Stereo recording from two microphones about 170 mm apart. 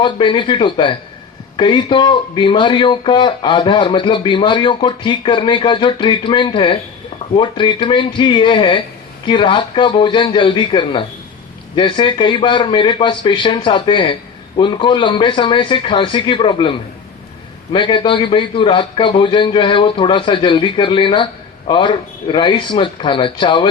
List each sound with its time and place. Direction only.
0.0 s speech: 30° left (ahead or behind)